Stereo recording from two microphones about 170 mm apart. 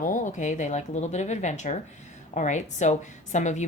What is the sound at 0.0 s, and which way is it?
A woman's voice, 50° left (ahead or behind).